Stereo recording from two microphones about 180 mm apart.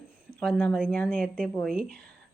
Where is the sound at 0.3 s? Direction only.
5° left (ahead or behind).